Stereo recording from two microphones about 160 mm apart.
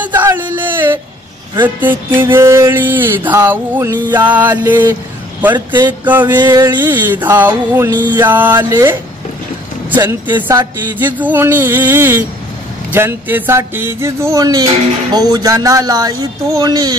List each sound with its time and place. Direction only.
0.0 s a sound: 15° right (ahead or behind)
1.6 s music: 10° right (ahead or behind)
6.4 s speech: 25° right (ahead or behind)
6.8 s music: 10° right (ahead or behind)
10.2 s speech: 30° right (ahead or behind)
11.1 s music: 10° right (ahead or behind)
15.1 s speech: 25° right (ahead or behind)